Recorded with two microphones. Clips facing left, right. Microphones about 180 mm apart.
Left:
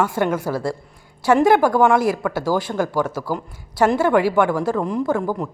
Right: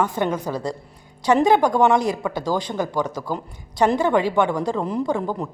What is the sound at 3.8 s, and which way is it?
Speech, 5° left (ahead or behind).